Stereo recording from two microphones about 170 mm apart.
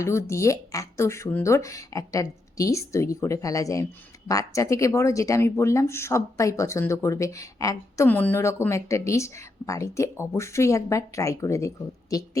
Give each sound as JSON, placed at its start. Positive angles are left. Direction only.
{"t": 0.0, "sound": "speech", "side_deg": 15}